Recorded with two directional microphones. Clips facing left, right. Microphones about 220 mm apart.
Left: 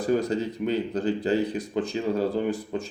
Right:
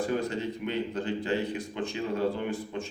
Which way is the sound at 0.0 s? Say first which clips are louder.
Left 5 dB; 40° left (ahead or behind).